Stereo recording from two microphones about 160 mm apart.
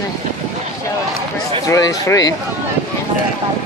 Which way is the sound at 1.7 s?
20° left (ahead or behind).